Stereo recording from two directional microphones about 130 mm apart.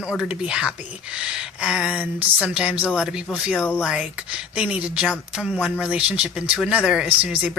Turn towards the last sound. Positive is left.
turn(degrees=-10)  # may be behind; listen again after turning